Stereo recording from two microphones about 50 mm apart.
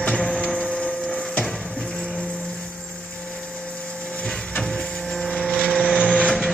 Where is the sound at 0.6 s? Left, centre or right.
Centre.